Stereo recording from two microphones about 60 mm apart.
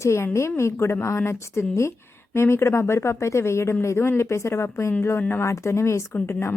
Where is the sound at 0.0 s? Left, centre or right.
Left.